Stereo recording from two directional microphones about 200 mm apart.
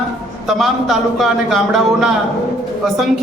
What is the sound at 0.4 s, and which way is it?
A man's voice, centre (ahead or behind).